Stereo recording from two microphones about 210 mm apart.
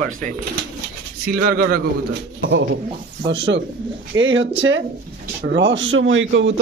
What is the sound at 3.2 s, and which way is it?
A man's voice, 55° right (ahead or behind).